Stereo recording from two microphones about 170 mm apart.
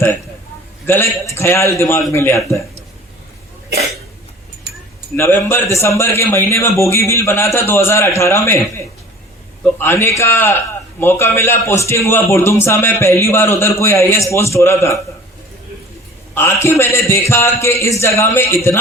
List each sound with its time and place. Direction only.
0.9 s a man's voice: 15° left (ahead or behind)
5.1 s a man's voice: 15° left (ahead or behind)
9.7 s a man's voice: 15° left (ahead or behind)
16.3 s a man's voice: 15° left (ahead or behind)